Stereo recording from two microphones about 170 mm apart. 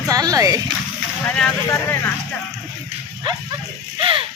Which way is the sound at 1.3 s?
10° left (ahead or behind).